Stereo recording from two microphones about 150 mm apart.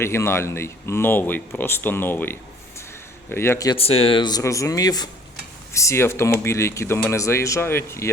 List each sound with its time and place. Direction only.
0.0 s speech: 15° left (ahead or behind)
3.8 s speech: 40° left (ahead or behind); by 8.1 s 15° left (ahead or behind)